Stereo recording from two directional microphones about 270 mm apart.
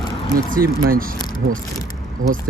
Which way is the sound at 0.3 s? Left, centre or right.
Right.